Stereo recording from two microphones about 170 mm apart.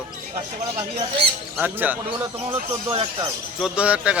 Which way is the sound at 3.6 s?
5° right (ahead or behind).